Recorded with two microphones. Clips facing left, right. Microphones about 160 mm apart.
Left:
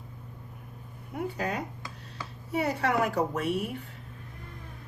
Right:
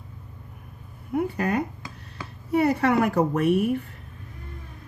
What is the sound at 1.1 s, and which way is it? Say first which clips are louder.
A woman's voice: right 7 dB; 60° right (ahead or behind).